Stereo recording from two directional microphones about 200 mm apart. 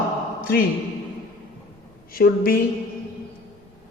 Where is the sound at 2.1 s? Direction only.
45° left (ahead or behind).